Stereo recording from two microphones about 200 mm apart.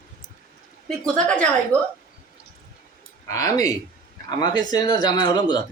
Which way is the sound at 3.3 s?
15° left (ahead or behind).